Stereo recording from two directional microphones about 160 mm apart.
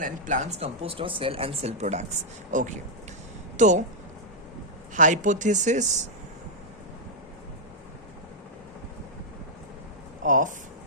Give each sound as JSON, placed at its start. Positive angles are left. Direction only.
{"t": 0.0, "sound": "speech", "side_deg": -50}
{"t": 4.9, "sound": "speech", "side_deg": -50}
{"t": 10.2, "sound": "speech", "side_deg": -55}